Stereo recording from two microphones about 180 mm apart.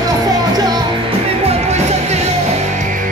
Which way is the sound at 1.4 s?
35° right (ahead or behind).